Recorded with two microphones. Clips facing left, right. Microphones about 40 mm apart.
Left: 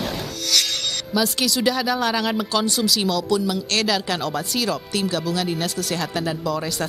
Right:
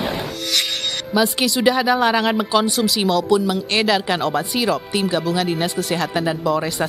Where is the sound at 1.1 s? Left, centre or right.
Centre.